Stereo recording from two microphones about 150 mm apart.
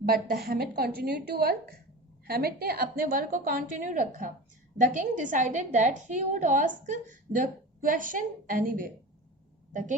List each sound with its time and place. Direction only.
0.4 s a woman's voice: 90° right; by 8.9 s 65° right (ahead or behind)